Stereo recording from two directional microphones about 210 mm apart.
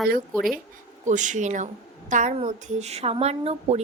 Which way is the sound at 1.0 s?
35° right (ahead or behind).